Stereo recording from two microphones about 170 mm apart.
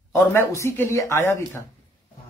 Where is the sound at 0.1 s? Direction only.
15° left (ahead or behind).